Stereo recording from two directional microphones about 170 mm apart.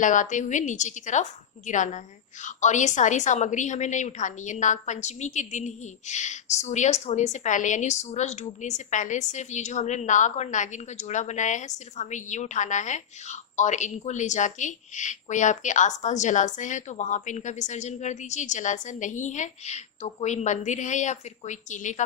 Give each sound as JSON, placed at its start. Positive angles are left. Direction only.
{"t": 0.0, "sound": "a woman's voice", "side_deg": 50}